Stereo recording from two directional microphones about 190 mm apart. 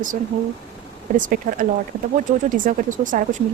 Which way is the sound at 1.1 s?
45° right (ahead or behind).